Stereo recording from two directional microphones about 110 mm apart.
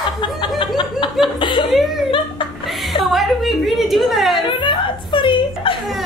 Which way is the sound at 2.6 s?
Centre (ahead or behind).